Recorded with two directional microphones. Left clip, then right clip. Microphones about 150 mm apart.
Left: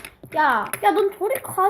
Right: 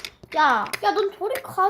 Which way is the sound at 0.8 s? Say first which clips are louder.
Left 3 dB; 20° left (ahead or behind).